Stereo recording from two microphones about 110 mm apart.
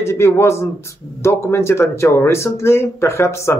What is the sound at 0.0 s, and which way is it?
Speech, 25° left (ahead or behind).